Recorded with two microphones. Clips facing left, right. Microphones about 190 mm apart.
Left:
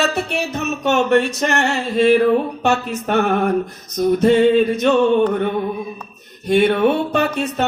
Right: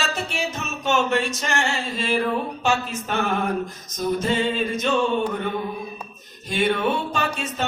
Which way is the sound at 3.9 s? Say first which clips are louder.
Left 9 dB; 65° left (ahead or behind).